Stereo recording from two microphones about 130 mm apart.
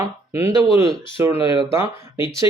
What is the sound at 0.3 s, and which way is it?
A man's voice, 25° right (ahead or behind).